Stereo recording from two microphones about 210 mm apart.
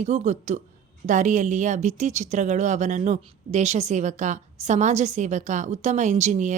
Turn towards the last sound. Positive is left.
turn(degrees=-35)  # may be behind; listen again after turning